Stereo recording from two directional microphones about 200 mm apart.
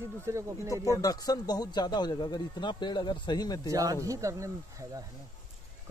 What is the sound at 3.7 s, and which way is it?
Speech, 15° right (ahead or behind).